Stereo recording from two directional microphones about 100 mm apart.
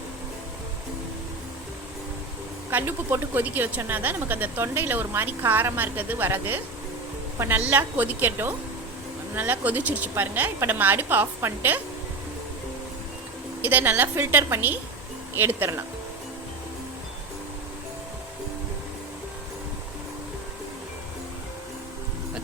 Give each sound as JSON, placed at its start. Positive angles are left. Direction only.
{"t": 2.6, "sound": "a woman's voice", "side_deg": -25}
{"t": 13.6, "sound": "speech", "side_deg": -20}